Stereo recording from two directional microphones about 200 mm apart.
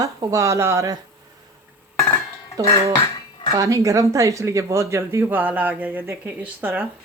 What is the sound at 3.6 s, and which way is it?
Speech, 15° right (ahead or behind).